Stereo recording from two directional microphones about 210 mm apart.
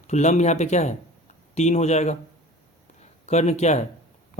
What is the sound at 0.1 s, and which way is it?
Speech, 35° left (ahead or behind).